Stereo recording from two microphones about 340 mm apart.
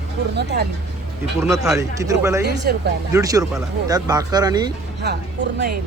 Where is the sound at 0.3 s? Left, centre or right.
Right.